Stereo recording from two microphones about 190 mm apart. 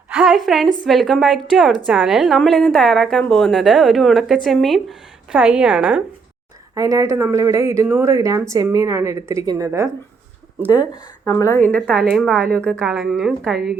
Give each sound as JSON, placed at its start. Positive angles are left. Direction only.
{"t": 0.1, "sound": "a sound", "side_deg": -5}
{"t": 0.9, "sound": "a woman's voice", "side_deg": 0}
{"t": 6.7, "sound": "a woman's voice", "side_deg": -20}
{"t": 11.3, "sound": "a woman's voice", "side_deg": 15}